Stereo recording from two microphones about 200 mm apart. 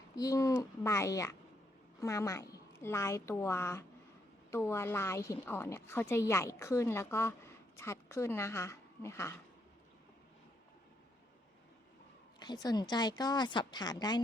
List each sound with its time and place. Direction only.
0.2 s a woman's voice: 15° left (ahead or behind)
12.4 s a woman's voice: 20° left (ahead or behind)